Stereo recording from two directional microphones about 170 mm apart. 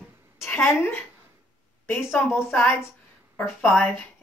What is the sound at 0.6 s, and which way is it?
Speech, 15° left (ahead or behind).